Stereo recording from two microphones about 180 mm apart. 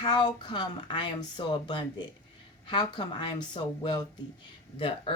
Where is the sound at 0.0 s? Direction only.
25° left (ahead or behind).